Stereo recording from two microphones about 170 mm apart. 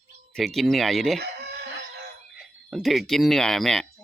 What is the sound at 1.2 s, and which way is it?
Chicken, 75° right (ahead or behind).